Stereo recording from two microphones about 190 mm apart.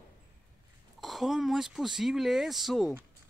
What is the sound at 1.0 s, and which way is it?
Speech, centre (ahead or behind).